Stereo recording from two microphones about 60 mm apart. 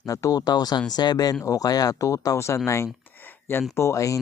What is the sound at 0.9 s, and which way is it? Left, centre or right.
Speech, left.